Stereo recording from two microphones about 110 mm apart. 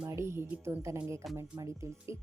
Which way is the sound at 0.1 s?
25° right (ahead or behind).